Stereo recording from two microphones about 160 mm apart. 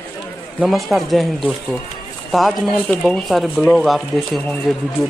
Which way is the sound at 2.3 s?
Centre (ahead or behind).